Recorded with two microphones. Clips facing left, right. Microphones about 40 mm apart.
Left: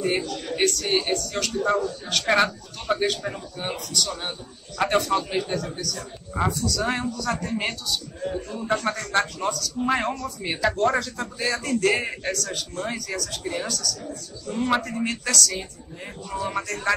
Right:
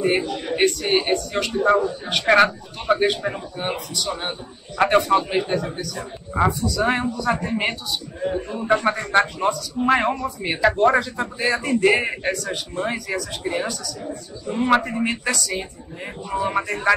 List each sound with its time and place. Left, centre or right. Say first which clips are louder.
0.0 s a man's voice: right 4 dB; right